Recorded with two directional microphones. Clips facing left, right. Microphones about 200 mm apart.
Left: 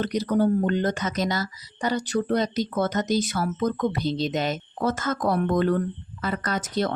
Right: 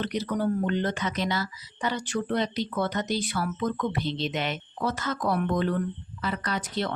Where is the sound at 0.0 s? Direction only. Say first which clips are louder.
Left 5 dB; 40° left (ahead or behind).